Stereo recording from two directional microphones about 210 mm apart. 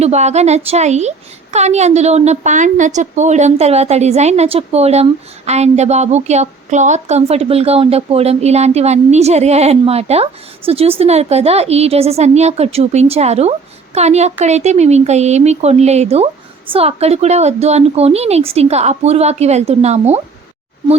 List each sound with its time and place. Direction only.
0.0 s a woman's voice: 30° right (ahead or behind)